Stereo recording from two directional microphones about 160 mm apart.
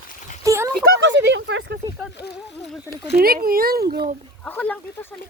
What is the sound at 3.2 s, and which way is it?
Speech, 70° right (ahead or behind).